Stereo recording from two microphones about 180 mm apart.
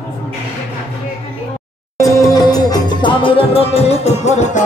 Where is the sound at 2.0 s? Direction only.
20° left (ahead or behind); by 4.6 s 40° left (ahead or behind).